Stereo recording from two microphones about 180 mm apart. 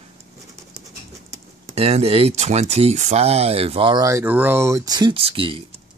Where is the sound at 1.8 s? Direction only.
35° right (ahead or behind).